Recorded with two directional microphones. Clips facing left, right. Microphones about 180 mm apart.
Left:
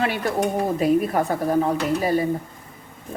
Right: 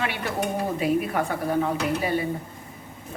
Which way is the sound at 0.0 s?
40° left (ahead or behind).